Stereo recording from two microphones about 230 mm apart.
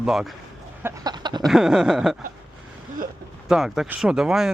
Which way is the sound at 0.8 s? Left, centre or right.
Centre.